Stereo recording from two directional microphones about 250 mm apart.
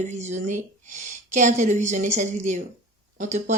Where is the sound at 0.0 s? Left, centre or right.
Right.